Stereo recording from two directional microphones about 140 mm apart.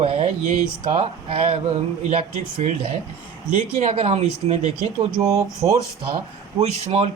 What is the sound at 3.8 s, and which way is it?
Speech, 45° right (ahead or behind).